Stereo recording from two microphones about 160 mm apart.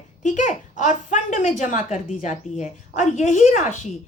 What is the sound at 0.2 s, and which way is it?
A woman's voice, 50° left (ahead or behind).